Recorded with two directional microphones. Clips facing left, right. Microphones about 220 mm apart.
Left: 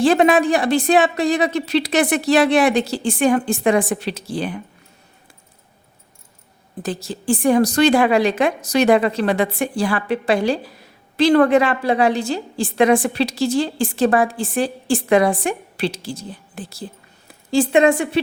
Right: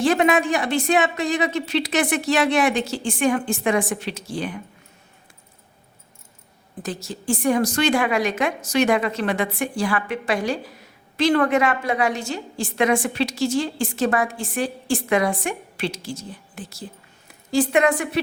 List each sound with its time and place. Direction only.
0.0 s a woman's voice: 30° left (ahead or behind)
6.8 s a woman's voice: 35° left (ahead or behind)